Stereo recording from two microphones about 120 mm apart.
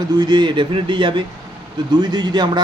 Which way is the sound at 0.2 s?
40° right (ahead or behind).